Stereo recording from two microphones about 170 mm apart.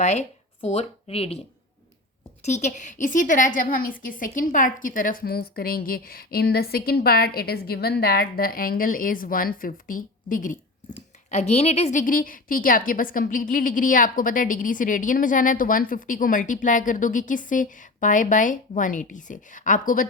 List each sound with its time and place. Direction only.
0.0 s speech: 40° left (ahead or behind)
2.4 s a woman's voice: 45° left (ahead or behind)